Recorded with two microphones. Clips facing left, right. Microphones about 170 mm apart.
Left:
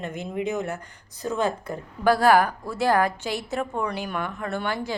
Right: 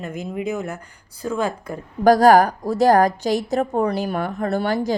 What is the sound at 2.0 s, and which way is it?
A woman's voice, 40° right (ahead or behind).